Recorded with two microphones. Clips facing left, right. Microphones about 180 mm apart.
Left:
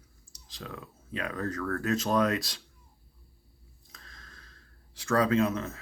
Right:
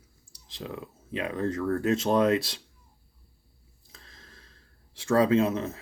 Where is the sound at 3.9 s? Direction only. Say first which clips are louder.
Right 1 dB; 30° right (ahead or behind).